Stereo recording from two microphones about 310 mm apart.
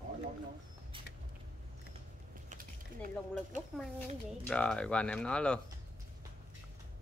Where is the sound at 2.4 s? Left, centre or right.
Right.